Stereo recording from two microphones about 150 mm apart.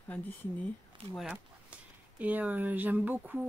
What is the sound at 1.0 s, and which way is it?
Speech, 35° right (ahead or behind).